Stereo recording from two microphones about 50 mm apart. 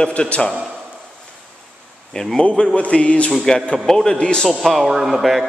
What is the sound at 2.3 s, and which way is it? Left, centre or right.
A man's voice, left.